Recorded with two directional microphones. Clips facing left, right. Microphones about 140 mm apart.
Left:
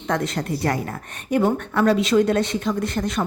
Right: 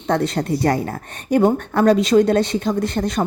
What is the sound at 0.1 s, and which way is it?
A woman's voice, 30° right (ahead or behind).